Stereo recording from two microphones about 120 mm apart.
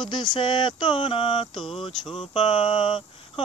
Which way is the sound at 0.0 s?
40° left (ahead or behind).